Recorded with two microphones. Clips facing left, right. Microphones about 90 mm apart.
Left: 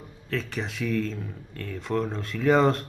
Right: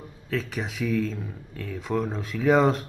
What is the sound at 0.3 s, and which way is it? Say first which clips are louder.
Speech: right 1 dB; 5° right (ahead or behind).